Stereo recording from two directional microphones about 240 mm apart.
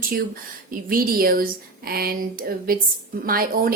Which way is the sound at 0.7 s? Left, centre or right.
Right.